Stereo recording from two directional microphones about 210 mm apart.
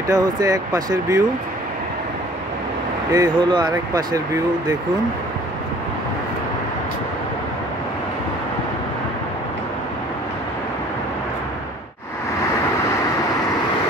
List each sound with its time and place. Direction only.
0.1 s speech: 15° right (ahead or behind)
3.1 s speech: 20° right (ahead or behind)